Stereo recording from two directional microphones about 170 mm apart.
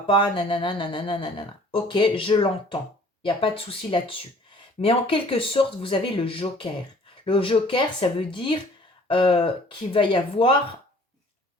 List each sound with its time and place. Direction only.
0.1 s speech: 30° left (ahead or behind)